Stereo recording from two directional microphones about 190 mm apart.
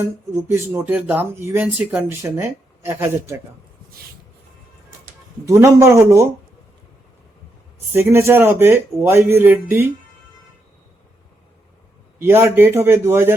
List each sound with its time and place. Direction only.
0.0 s speech: 15° right (ahead or behind)
5.5 s speech: 15° right (ahead or behind)
7.9 s speech: 15° right (ahead or behind)
12.2 s speech: 10° right (ahead or behind)